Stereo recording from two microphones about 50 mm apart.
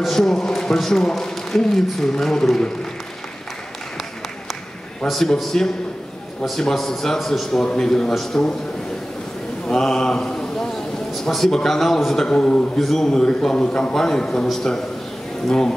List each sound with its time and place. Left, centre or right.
0.0 s a man's voice: centre
5.0 s a man's voice: centre
9.7 s mantra: centre
11.2 s a man's voice: centre